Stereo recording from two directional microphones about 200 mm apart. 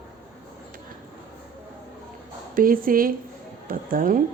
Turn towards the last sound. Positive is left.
turn(degrees=-45)  # may be behind; listen again after turning